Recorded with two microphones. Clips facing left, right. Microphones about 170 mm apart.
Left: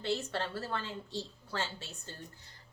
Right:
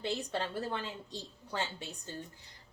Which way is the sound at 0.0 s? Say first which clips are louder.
Left 1 dB; 15° right (ahead or behind).